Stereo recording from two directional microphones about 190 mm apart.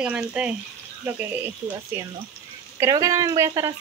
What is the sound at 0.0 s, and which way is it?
Speech, 5° right (ahead or behind).